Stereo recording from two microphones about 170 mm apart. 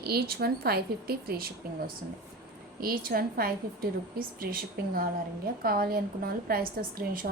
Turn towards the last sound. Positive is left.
turn(degrees=-55)  # may be behind; listen again after turning